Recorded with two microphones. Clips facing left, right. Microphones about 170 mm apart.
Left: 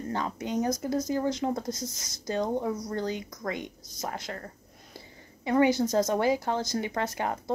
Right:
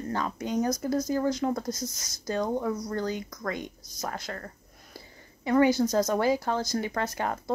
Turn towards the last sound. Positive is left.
turn(degrees=20)  # may be behind; listen again after turning